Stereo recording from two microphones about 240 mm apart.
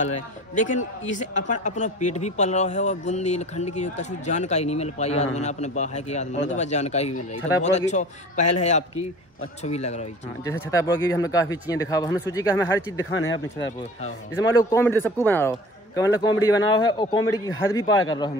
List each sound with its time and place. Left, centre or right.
0.0 s a man's voice: left
10.4 s speech: centre
13.1 s speech: left
14.3 s speech: centre